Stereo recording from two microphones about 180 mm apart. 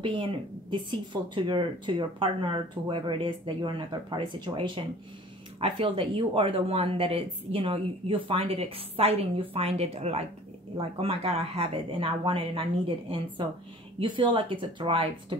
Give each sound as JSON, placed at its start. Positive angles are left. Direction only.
{"t": 0.0, "sound": "speech", "side_deg": -25}